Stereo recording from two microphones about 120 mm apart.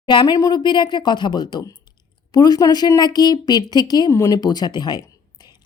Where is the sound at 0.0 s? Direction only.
45° left (ahead or behind).